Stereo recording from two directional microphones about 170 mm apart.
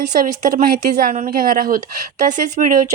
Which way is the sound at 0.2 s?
55° right (ahead or behind).